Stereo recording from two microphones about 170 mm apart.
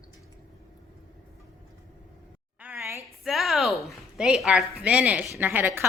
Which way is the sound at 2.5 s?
10° right (ahead or behind).